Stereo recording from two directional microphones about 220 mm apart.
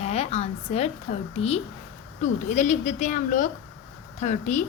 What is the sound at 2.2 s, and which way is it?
A woman's voice, 35° left (ahead or behind).